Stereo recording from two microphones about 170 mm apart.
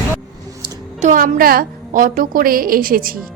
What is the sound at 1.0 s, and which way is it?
A woman's voice, 55° right (ahead or behind).